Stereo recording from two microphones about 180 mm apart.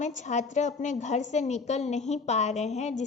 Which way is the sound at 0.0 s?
40° left (ahead or behind).